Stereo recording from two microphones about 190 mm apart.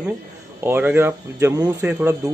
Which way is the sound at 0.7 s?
10° right (ahead or behind).